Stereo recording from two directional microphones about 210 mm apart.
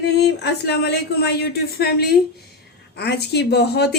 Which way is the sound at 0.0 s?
55° left (ahead or behind).